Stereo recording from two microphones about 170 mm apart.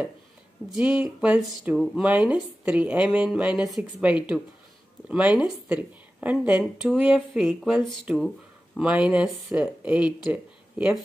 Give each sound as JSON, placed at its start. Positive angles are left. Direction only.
{"t": 0.7, "sound": "speech", "side_deg": -5}